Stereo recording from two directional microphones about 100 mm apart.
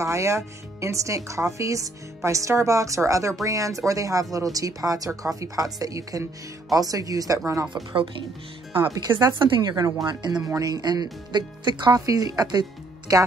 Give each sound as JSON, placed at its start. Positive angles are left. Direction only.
{"t": 0.0, "sound": "speech", "side_deg": -30}
{"t": 7.7, "sound": "a woman's voice", "side_deg": -60}